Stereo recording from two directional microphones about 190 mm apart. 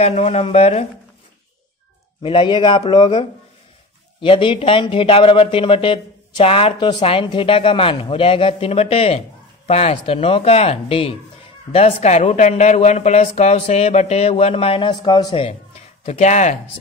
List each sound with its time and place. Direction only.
0.0 s speech: 35° left (ahead or behind)
2.2 s speech: 25° left (ahead or behind)